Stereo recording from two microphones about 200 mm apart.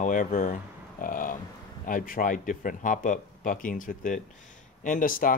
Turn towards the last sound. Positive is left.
turn(degrees=45)  # may be behind; listen again after turning